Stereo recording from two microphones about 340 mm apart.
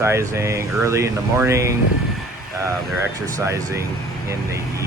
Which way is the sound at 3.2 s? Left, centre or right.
Centre.